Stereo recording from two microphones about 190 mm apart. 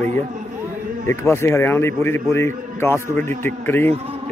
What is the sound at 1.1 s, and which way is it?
A man's voice, 15° left (ahead or behind).